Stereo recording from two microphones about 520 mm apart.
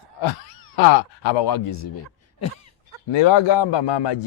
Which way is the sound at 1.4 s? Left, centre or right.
Left.